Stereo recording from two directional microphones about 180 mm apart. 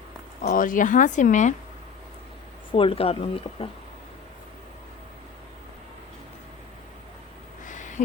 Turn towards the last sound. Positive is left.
turn(degrees=45)  # may be behind; listen again after turning